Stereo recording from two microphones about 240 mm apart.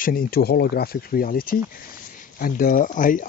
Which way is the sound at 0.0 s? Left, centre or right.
Left.